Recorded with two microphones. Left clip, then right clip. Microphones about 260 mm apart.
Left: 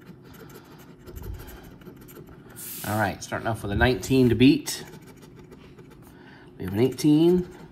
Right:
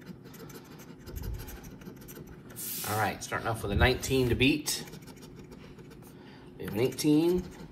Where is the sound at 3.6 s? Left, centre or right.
Left.